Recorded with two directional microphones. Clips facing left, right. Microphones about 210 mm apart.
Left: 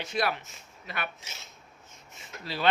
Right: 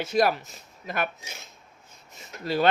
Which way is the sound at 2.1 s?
45° right (ahead or behind).